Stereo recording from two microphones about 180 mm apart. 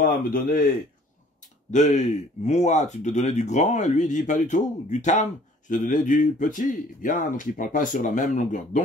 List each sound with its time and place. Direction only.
0.0 s speech: 45° left (ahead or behind)
1.7 s speech: 40° left (ahead or behind)